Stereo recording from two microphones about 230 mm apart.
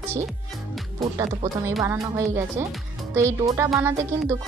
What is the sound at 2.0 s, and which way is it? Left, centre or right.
Speech, centre.